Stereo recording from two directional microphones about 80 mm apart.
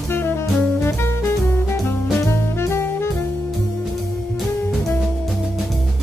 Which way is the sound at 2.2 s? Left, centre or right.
Left.